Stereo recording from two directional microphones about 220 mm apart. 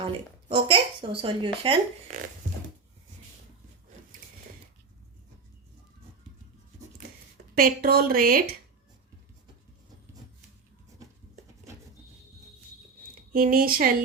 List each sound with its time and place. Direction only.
0.5 s speech: 25° right (ahead or behind)
7.5 s a woman's voice: 40° right (ahead or behind)
13.3 s a woman's voice: 40° right (ahead or behind)